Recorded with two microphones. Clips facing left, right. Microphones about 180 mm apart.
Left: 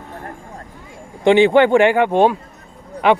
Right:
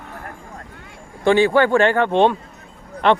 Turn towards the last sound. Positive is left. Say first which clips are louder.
# left 2 dB
turn(degrees=5)  # may be behind; listen again after turning